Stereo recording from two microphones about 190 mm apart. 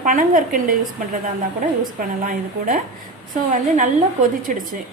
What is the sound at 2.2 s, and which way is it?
A woman's voice, 45° right (ahead or behind).